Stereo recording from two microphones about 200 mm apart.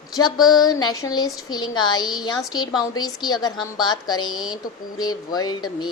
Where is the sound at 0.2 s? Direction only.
20° left (ahead or behind).